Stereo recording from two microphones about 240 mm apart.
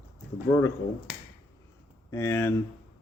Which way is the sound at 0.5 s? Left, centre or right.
Centre.